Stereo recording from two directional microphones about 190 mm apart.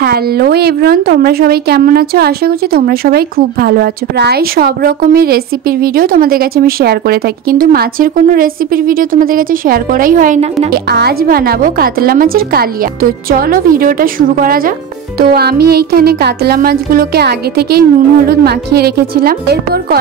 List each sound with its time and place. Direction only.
0.0 s speech: 55° right (ahead or behind); by 10.7 s 35° right (ahead or behind)
10.7 s speech: 55° right (ahead or behind)